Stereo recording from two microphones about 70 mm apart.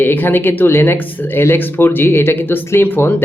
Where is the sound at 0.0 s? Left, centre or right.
Left.